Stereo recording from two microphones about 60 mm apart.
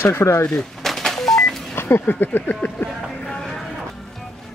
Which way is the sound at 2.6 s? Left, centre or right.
Centre.